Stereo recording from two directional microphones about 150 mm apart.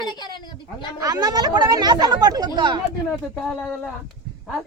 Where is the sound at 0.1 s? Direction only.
30° left (ahead or behind).